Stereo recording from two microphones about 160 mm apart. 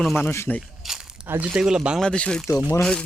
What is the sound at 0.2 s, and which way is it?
Speech, 15° left (ahead or behind).